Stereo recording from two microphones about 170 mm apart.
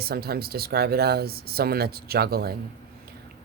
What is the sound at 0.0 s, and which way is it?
Speech, 65° right (ahead or behind).